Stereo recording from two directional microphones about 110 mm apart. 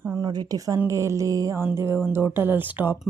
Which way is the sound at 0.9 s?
25° right (ahead or behind).